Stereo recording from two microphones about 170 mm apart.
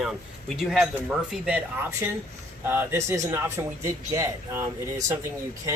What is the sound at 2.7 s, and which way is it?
Speech, 15° right (ahead or behind).